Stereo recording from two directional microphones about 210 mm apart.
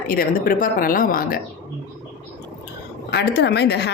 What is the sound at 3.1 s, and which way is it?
Speech, 50° left (ahead or behind).